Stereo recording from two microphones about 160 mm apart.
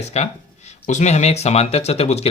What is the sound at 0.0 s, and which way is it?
Speech, 45° left (ahead or behind).